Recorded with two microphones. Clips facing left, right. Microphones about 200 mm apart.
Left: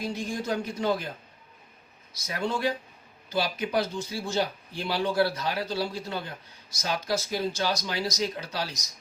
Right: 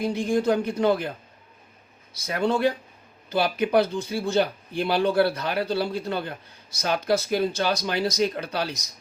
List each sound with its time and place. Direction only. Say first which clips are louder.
0.0 s speech: right 9 dB; 60° right (ahead or behind)
2.1 s speech: right 6 dB; 60° right (ahead or behind)